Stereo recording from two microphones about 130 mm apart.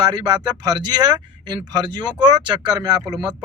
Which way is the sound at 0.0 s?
35° right (ahead or behind).